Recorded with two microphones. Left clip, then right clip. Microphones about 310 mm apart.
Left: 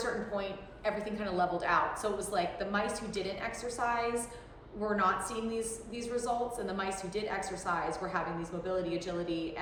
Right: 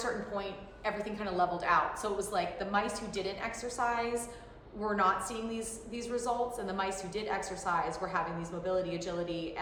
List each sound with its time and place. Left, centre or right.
0.0 s a woman's voice: centre